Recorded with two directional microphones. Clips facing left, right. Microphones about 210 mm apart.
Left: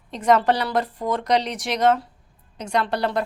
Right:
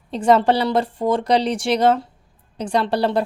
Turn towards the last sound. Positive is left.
turn(degrees=-30)  # may be behind; listen again after turning